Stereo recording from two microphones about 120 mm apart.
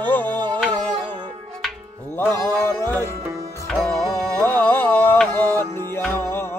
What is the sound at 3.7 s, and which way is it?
Music, centre (ahead or behind).